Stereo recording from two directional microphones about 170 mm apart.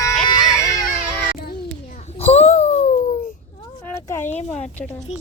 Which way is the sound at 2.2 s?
35° left (ahead or behind).